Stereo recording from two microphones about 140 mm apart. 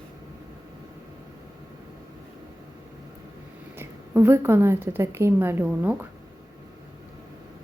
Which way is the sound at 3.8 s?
15° right (ahead or behind).